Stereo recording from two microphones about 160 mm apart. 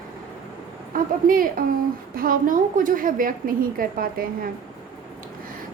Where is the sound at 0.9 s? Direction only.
60° right (ahead or behind).